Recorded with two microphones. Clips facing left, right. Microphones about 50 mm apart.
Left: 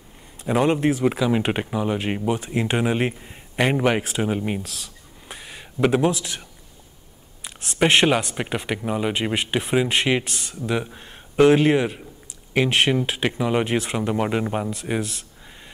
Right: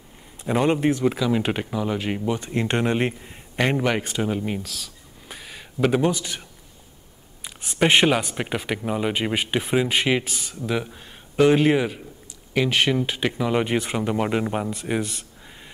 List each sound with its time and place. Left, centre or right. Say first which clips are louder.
0.4 s speech: left 1 dB; centre
1.0 s speech: left 1 dB; centre
7.4 s speech: left 1 dB; centre
12.5 s speech: left 1 dB; left
12.9 s speech: left 1 dB; centre